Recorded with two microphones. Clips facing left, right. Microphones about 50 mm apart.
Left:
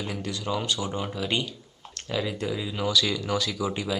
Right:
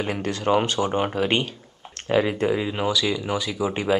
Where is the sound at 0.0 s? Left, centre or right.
Right.